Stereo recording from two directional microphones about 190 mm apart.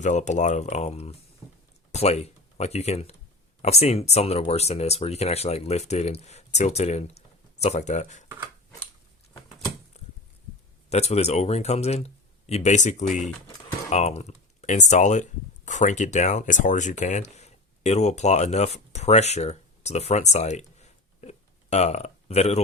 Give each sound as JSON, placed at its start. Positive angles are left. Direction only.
{"t": 0.0, "sound": "speech", "side_deg": 40}
{"t": 10.8, "sound": "speech", "side_deg": 35}